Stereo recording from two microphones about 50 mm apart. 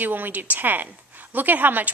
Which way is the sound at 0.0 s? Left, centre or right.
Right.